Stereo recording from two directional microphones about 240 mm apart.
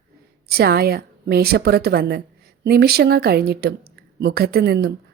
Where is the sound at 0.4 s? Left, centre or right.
Right.